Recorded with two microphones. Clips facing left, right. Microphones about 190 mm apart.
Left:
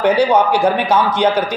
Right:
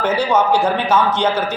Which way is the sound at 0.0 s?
15° left (ahead or behind).